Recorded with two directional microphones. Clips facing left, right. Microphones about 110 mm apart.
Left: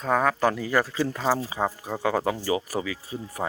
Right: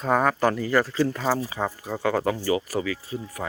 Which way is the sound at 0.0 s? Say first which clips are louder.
Right 1 dB; 5° right (ahead or behind).